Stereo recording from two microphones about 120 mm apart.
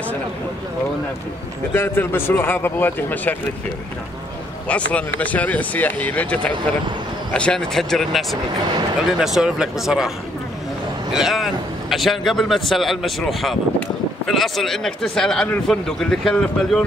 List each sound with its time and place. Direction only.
1.7 s speech: 20° left (ahead or behind)
4.6 s speech: 10° left (ahead or behind)